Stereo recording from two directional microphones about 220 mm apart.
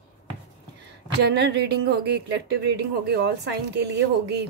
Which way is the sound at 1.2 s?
50° right (ahead or behind).